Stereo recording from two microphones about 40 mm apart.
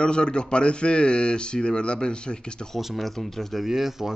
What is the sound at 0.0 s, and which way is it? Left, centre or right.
Speech, left.